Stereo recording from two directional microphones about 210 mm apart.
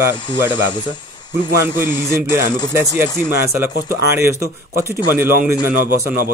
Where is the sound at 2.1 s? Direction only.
10° right (ahead or behind).